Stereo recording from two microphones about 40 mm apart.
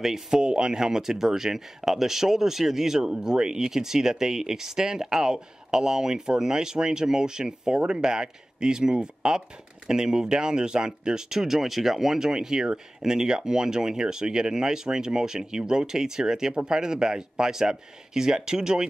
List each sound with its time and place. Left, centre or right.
0.0 s speech: centre
0.4 s speech: right